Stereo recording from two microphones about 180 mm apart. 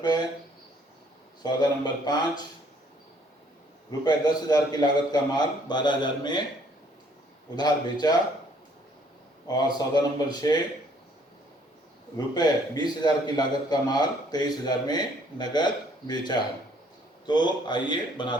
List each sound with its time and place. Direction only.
0.0 s a sound: 25° left (ahead or behind)
1.4 s a man's voice: 25° left (ahead or behind)
4.0 s a man's voice: 25° left (ahead or behind)
7.5 s a man's voice: 25° left (ahead or behind)
9.5 s a man's voice: 20° left (ahead or behind)
12.1 s a man's voice: 20° left (ahead or behind)